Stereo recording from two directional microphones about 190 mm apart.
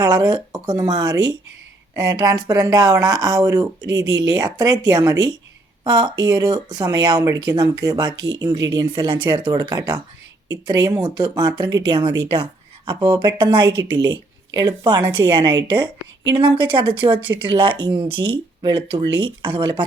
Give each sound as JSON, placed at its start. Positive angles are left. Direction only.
{"t": 0.0, "sound": "speech", "side_deg": -20}